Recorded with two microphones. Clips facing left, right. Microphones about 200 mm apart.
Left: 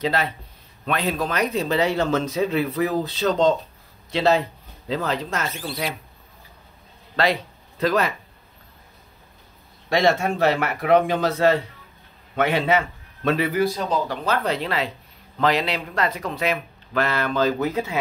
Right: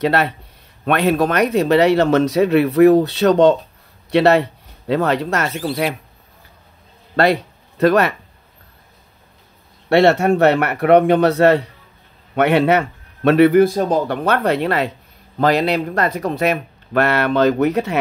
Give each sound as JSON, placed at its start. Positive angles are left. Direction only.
{"t": 0.0, "sound": "speech", "side_deg": -65}
{"t": 7.8, "sound": "speech", "side_deg": -65}
{"t": 9.8, "sound": "a man's voice", "side_deg": -70}
{"t": 15.3, "sound": "speech", "side_deg": -45}